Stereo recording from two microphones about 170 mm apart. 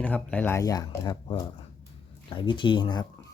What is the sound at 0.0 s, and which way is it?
Speech, 10° left (ahead or behind).